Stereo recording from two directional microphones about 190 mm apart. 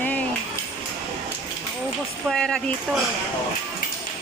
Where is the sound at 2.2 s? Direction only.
5° left (ahead or behind).